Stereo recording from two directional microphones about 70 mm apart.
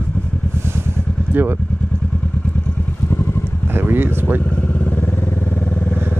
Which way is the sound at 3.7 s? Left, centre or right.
Right.